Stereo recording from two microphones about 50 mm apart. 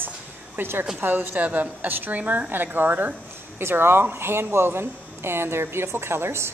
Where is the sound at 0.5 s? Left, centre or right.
Right.